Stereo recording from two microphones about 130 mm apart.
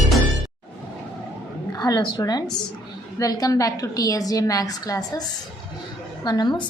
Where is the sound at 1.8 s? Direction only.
30° left (ahead or behind).